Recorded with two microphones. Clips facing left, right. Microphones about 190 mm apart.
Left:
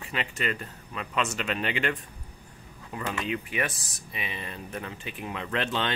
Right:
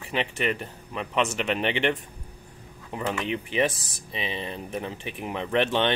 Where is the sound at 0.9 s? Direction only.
25° right (ahead or behind).